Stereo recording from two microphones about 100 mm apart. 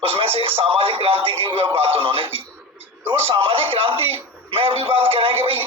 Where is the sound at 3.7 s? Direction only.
65° right (ahead or behind).